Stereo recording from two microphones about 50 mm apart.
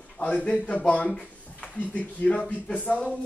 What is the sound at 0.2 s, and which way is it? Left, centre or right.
Speech, left.